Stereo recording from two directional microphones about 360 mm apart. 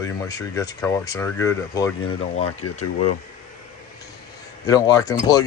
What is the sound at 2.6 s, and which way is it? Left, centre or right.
Speech, left.